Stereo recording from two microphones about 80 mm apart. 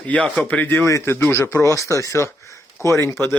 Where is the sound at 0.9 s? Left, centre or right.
Left.